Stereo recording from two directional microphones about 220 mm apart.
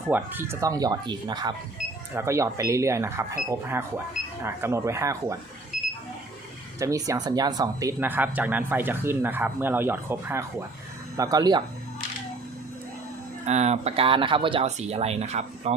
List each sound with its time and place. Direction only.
0.1 s speech: 10° right (ahead or behind)
6.7 s speech: 15° right (ahead or behind)
13.4 s speech: 30° right (ahead or behind)